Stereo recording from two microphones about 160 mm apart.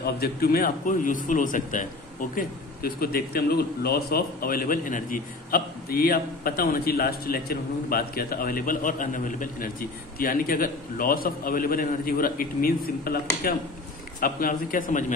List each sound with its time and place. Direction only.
0.0 s a man's voice: 70° left (ahead or behind); by 15.1 s 50° left (ahead or behind)